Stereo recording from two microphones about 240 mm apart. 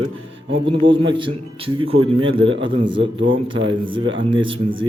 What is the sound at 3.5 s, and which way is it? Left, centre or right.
Speech, right.